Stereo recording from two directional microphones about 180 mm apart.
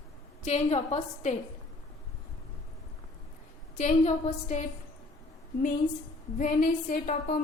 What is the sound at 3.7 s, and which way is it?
Speech, 35° left (ahead or behind).